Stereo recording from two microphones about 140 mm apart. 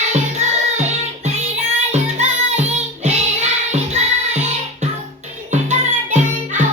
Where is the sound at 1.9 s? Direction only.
50° right (ahead or behind).